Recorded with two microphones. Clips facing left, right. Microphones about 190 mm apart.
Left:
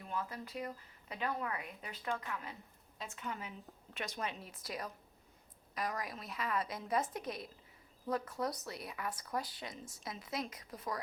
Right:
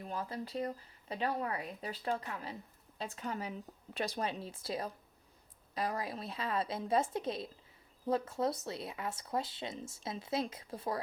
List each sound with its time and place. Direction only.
0.0 s speech: 35° right (ahead or behind)